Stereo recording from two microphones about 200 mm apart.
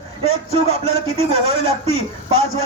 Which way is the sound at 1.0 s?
30° right (ahead or behind).